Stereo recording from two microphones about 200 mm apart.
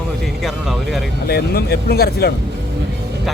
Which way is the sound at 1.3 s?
50° left (ahead or behind).